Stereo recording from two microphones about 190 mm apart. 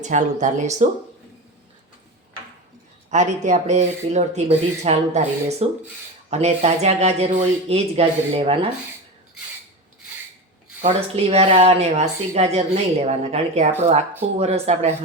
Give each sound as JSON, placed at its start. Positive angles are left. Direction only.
{"t": 0.0, "sound": "speech", "side_deg": -40}
{"t": 3.1, "sound": "speech", "side_deg": -40}
{"t": 10.8, "sound": "speech", "side_deg": -35}